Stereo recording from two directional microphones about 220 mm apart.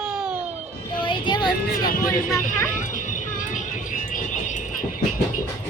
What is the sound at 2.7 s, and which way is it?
Vehicle, 35° left (ahead or behind).